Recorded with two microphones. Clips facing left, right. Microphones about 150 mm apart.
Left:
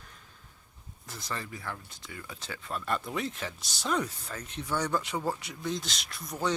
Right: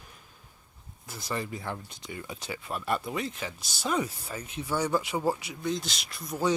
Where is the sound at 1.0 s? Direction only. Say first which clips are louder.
Right 5 dB; 10° right (ahead or behind).